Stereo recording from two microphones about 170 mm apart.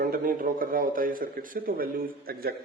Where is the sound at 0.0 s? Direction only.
55° right (ahead or behind).